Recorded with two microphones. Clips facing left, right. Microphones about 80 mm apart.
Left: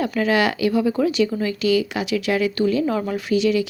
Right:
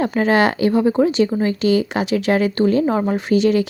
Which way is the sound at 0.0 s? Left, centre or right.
Right.